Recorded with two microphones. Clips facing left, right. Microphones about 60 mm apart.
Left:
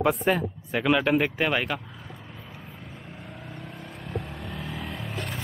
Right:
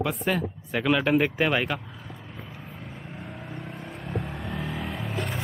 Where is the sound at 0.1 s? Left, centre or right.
Centre.